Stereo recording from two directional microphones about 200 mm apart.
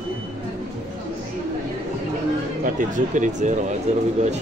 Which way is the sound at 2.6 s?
40° right (ahead or behind).